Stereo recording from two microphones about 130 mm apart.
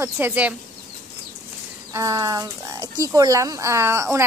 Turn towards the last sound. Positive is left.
turn(degrees=-20)  # may be behind; listen again after turning